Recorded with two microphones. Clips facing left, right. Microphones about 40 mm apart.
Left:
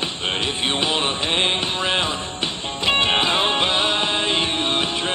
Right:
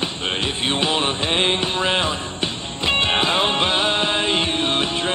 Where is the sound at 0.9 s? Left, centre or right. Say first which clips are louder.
Right 1 dB; centre.